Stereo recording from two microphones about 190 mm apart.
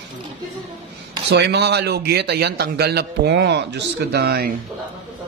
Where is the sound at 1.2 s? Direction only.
65° right (ahead or behind).